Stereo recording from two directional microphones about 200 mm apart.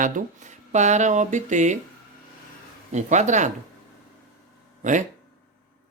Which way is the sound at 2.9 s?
35° right (ahead or behind).